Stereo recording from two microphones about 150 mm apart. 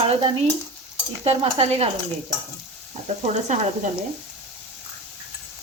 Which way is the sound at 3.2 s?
50° right (ahead or behind).